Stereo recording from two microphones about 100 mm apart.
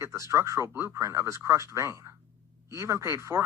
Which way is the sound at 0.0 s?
30° right (ahead or behind).